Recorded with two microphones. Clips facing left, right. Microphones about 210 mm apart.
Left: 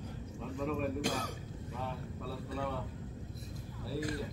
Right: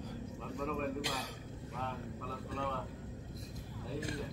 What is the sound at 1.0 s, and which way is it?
Speech, 50° left (ahead or behind).